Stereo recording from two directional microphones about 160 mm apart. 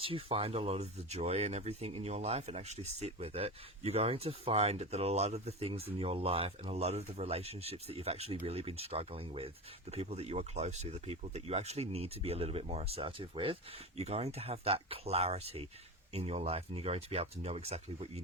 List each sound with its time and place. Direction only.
0.0 s speech: 35° right (ahead or behind)